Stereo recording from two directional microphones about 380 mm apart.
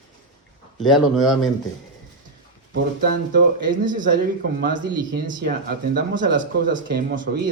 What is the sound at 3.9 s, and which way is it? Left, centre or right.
Speech, right.